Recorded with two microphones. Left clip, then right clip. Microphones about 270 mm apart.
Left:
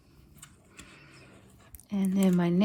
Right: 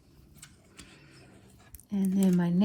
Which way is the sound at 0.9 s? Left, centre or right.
Left.